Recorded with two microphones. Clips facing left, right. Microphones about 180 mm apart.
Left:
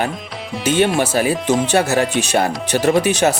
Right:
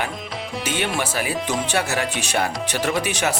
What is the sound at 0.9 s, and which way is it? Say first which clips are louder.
Speech: left 7 dB; 40° left (ahead or behind).